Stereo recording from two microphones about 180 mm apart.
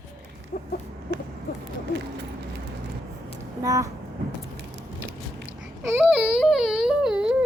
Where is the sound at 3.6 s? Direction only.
15° right (ahead or behind).